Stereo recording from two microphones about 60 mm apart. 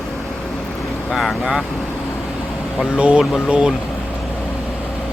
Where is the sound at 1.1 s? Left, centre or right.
Centre.